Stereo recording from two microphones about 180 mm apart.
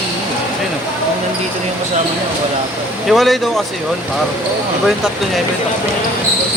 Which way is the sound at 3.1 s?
Centre (ahead or behind).